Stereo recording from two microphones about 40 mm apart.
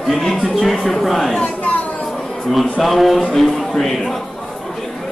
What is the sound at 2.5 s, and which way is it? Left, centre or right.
Speech, centre.